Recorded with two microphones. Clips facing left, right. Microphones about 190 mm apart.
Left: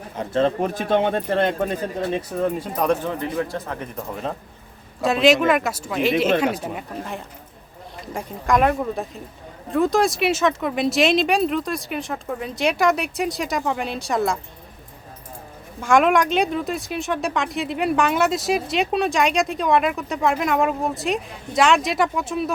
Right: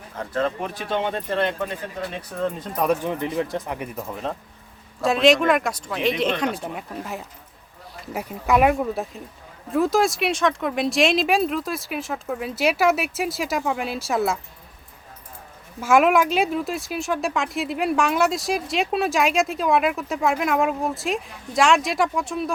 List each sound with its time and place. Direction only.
0.2 s speech: 25° left (ahead or behind)
0.6 s speech: 45° left (ahead or behind)
2.1 s speech: 10° left (ahead or behind)
2.8 s speech: 5° right (ahead or behind)
3.1 s speech: 20° right (ahead or behind)
4.1 s speech: centre (ahead or behind)
15.8 s speech: 5° right (ahead or behind)